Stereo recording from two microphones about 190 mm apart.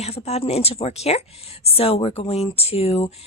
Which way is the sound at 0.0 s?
35° left (ahead or behind).